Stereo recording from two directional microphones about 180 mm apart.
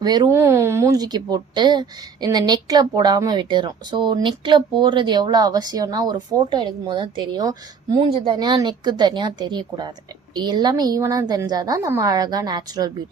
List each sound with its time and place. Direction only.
0.0 s a woman's voice: 20° right (ahead or behind)